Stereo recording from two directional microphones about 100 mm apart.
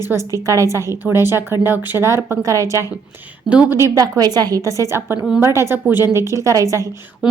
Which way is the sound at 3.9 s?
35° right (ahead or behind).